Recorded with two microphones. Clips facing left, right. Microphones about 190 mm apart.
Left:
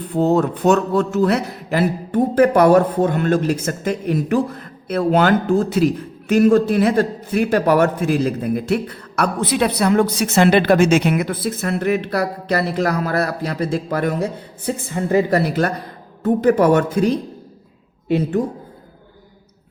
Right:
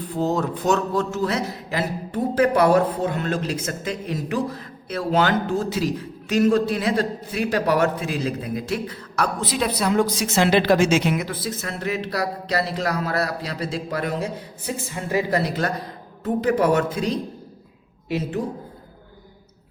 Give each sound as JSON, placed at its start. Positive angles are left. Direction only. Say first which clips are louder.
{"t": 0.1, "sound": "a woman's voice", "louder": "left 7 dB", "side_deg": 60}
{"t": 16.2, "sound": "a woman's voice", "louder": "left 6 dB", "side_deg": 45}